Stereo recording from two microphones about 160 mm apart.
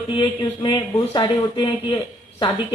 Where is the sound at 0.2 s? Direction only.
30° left (ahead or behind).